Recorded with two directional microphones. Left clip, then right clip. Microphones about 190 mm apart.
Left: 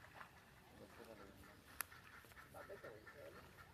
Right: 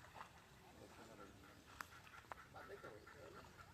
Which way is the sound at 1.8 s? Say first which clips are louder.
Left 2 dB; 40° left (ahead or behind).